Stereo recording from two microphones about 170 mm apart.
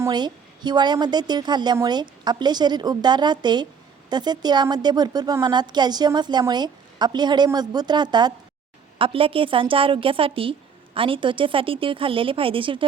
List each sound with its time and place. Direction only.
0.0 s a woman's voice: 25° right (ahead or behind)